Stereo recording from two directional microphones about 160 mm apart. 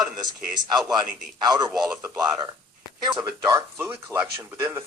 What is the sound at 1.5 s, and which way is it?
Speech, 25° right (ahead or behind).